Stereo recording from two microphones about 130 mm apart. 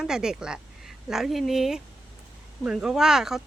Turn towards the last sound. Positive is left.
turn(degrees=-5)  # may be behind; listen again after turning